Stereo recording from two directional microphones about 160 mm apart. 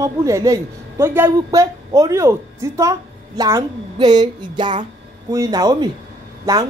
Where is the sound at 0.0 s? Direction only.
20° right (ahead or behind).